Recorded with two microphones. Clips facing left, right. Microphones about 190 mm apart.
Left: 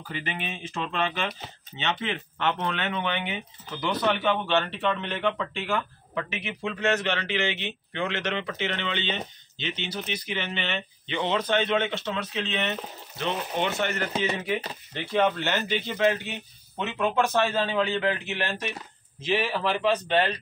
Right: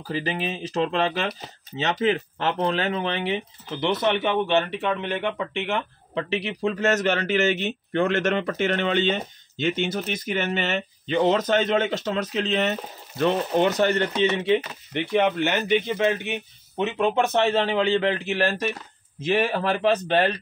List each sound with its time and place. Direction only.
0.0 s speech: 35° right (ahead or behind)
15.0 s speech: 15° right (ahead or behind); by 18.7 s 35° right (ahead or behind)
19.2 s speech: 50° right (ahead or behind)